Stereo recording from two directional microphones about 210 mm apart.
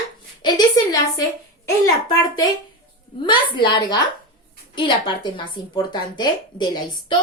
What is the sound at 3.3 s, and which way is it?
A woman's voice, 20° left (ahead or behind).